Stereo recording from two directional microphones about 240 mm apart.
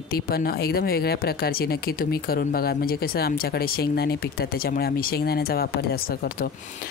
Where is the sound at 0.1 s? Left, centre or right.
Left.